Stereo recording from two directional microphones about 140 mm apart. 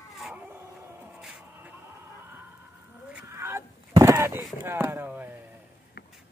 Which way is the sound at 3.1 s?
20° right (ahead or behind).